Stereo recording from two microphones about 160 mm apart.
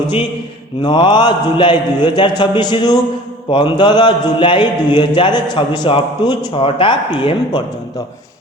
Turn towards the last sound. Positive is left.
turn(degrees=35)  # may be behind; listen again after turning